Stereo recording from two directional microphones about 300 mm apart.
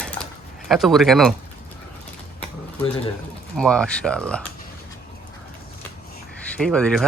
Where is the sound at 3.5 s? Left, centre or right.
Centre.